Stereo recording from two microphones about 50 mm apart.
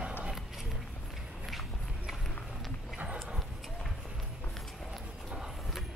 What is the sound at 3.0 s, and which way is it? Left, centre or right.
Dog, right.